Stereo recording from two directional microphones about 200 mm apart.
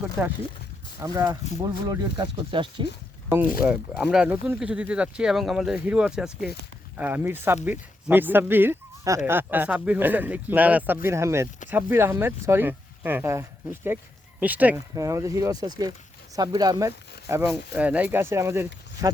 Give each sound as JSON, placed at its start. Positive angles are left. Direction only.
{"t": 0.2, "sound": "speech", "side_deg": -10}
{"t": 3.6, "sound": "speech", "side_deg": -5}